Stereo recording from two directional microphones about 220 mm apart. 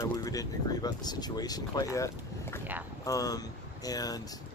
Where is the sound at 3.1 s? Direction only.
15° left (ahead or behind).